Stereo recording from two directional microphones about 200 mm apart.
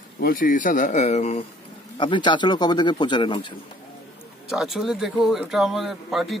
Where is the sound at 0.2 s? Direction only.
45° left (ahead or behind); by 3.5 s 25° left (ahead or behind).